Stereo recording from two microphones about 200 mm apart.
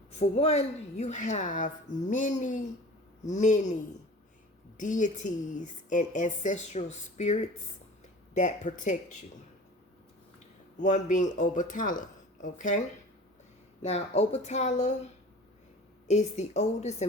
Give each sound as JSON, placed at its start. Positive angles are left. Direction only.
{"t": 0.1, "sound": "a woman's voice", "side_deg": 30}
{"t": 4.8, "sound": "a woman's voice", "side_deg": 40}
{"t": 10.8, "sound": "a woman's voice", "side_deg": 40}
{"t": 13.8, "sound": "a woman's voice", "side_deg": 30}